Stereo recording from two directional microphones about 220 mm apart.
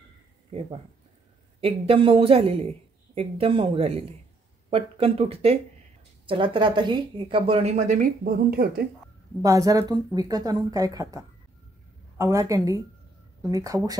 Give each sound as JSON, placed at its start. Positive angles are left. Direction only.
{"t": 0.5, "sound": "speech", "side_deg": -25}
{"t": 9.4, "sound": "speech", "side_deg": -15}